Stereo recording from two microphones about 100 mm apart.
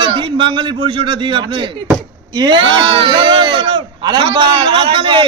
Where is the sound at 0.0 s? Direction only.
55° right (ahead or behind).